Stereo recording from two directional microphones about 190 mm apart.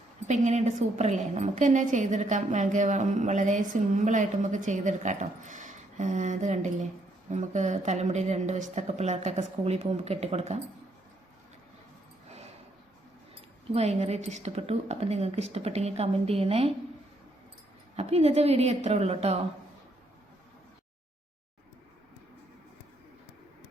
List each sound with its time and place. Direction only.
0.3 s a woman's voice: 40° right (ahead or behind)
13.7 s a woman's voice: 35° right (ahead or behind)
17.9 s a woman's voice: 35° right (ahead or behind)